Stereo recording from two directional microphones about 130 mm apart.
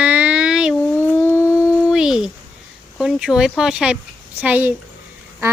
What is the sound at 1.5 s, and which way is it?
Dog, 25° left (ahead or behind).